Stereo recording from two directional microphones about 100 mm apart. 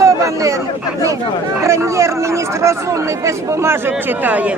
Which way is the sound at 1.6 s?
30° right (ahead or behind).